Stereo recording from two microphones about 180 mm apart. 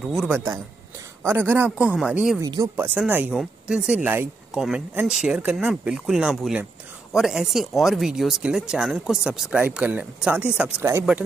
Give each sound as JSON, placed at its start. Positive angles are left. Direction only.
{"t": 1.2, "sound": "a man's voice", "side_deg": -10}
{"t": 2.4, "sound": "speech", "side_deg": -20}
{"t": 2.7, "sound": "speech", "side_deg": -10}